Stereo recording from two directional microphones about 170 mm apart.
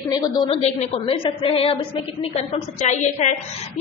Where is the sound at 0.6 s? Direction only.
40° left (ahead or behind).